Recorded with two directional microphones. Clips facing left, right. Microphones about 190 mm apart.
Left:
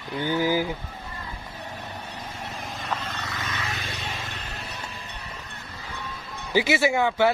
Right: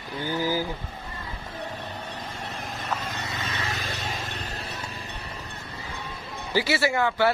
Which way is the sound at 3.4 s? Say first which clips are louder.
Right 2 dB; 35° right (ahead or behind).